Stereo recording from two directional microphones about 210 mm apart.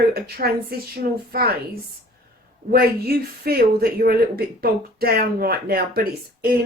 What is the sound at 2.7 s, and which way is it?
Speech, 45° right (ahead or behind).